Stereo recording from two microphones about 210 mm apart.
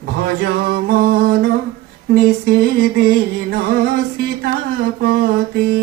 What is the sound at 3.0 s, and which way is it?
Music, 50° right (ahead or behind).